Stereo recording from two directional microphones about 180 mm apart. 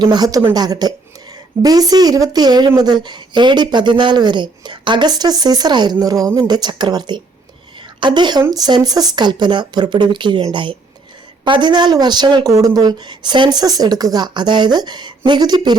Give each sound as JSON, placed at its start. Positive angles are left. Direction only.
{"t": 0.0, "sound": "a woman's voice", "side_deg": -25}